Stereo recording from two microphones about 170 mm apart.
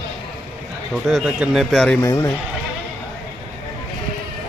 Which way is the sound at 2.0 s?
15° left (ahead or behind).